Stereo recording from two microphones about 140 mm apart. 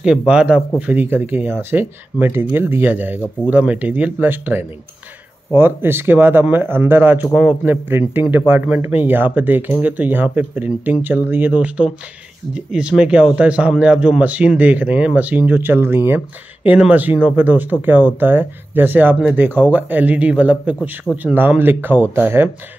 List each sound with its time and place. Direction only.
0.3 s a man's voice: 5° right (ahead or behind)